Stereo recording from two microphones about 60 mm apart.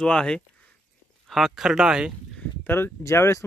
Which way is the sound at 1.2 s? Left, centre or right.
Centre.